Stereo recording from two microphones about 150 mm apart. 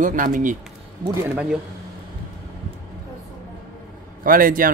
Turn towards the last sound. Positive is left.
turn(degrees=-70)  # may be behind; listen again after turning